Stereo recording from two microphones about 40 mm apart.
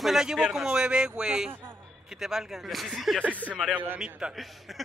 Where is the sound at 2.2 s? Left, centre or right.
Centre.